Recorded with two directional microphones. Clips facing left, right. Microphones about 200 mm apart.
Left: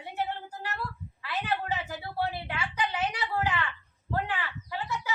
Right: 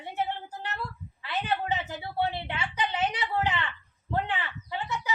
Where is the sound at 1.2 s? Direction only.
20° right (ahead or behind).